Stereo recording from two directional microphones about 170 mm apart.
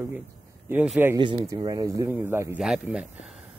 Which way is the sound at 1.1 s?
30° right (ahead or behind).